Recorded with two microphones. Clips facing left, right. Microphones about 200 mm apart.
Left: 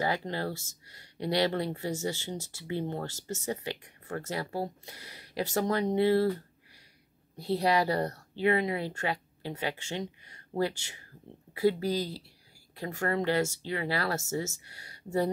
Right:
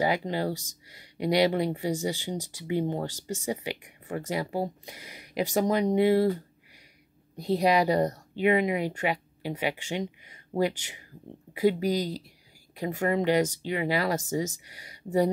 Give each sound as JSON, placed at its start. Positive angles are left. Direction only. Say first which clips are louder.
{"t": 0.0, "sound": "speech", "louder": "right 4 dB", "side_deg": -15}